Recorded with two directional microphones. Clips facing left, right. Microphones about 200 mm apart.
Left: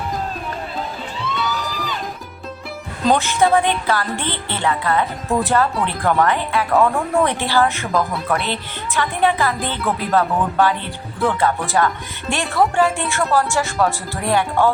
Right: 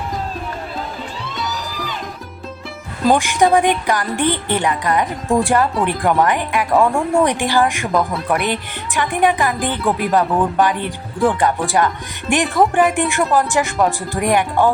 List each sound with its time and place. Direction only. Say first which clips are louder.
3.2 s speech: right 2 dB; 15° right (ahead or behind)